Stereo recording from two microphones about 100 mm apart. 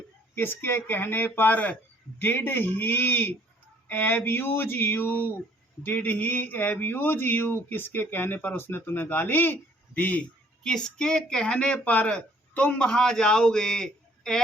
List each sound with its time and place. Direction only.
0.3 s speech: 20° left (ahead or behind); by 14.4 s 5° left (ahead or behind)